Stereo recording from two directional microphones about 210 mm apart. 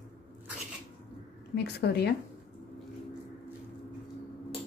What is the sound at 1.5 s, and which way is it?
Speech, 55° left (ahead or behind).